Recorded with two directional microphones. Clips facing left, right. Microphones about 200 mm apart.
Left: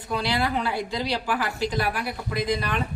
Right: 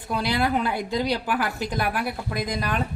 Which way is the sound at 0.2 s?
50° right (ahead or behind).